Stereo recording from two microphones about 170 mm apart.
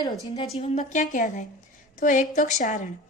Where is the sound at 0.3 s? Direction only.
40° left (ahead or behind).